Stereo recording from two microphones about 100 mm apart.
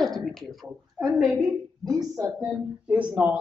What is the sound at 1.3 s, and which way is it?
A woman's voice, 35° right (ahead or behind).